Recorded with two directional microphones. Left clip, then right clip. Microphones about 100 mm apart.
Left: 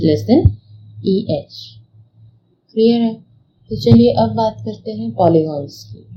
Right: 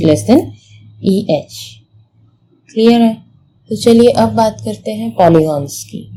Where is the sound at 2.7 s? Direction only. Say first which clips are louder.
Right 4 dB; 85° right.